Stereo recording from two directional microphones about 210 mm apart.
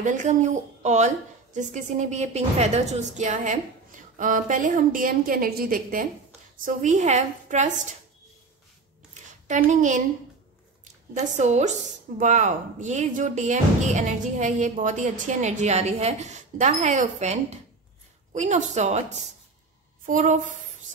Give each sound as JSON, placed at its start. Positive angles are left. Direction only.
{"t": 0.0, "sound": "speech", "side_deg": -35}
{"t": 9.5, "sound": "a woman's voice", "side_deg": -35}